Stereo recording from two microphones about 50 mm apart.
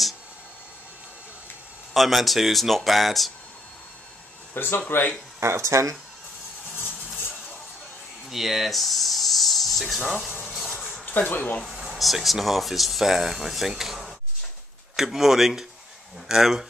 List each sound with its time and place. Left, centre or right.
2.0 s speech: centre
4.6 s speech: left
5.4 s speech: right
8.3 s speech: centre
10.4 s a sound: centre
11.1 s speech: left
11.7 s a sound: centre
12.0 s speech: centre